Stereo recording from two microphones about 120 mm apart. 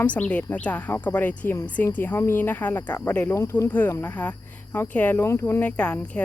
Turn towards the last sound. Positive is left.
turn(degrees=10)  # may be behind; listen again after turning